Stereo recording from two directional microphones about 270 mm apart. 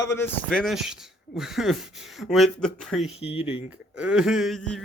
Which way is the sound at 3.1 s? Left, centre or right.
Left.